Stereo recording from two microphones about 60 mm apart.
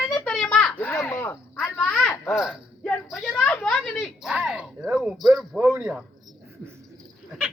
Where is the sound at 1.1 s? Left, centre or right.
Left.